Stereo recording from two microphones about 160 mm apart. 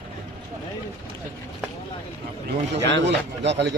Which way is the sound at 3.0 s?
90° right.